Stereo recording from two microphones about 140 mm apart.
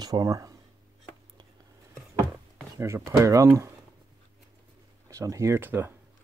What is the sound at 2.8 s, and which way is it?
Speech, 20° right (ahead or behind).